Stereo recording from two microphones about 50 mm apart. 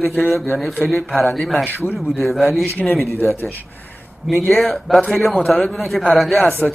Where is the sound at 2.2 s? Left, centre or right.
Centre.